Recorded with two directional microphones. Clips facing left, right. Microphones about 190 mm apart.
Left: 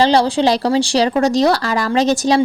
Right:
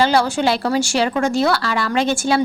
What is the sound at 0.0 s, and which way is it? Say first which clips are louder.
A woman's voice: left 3 dB; 35° left (ahead or behind).